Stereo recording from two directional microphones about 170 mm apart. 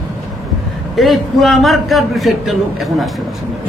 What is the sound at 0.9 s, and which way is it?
A man's voice, centre (ahead or behind).